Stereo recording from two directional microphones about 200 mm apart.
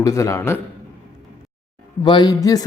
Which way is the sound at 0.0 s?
15° left (ahead or behind).